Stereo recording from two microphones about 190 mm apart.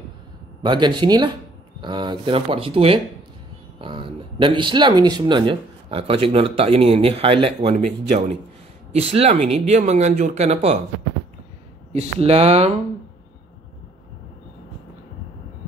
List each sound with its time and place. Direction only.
0.7 s speech: 25° right (ahead or behind)
8.9 s speech: 35° right (ahead or behind)
11.9 s speech: 35° right (ahead or behind)